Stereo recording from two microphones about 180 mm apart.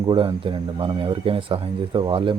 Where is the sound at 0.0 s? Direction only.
25° right (ahead or behind).